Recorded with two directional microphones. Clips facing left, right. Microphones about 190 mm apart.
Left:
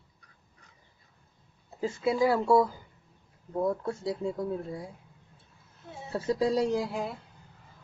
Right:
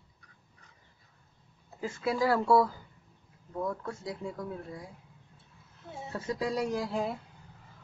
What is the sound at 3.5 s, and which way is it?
Speech, 30° left (ahead or behind).